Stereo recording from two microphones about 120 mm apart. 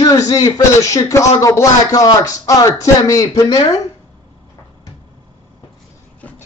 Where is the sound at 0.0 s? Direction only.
30° left (ahead or behind).